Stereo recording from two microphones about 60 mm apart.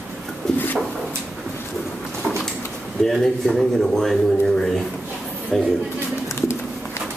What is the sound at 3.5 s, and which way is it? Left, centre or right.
Speech, centre.